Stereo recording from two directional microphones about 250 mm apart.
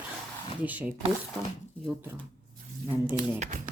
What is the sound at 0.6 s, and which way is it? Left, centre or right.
Speech, centre.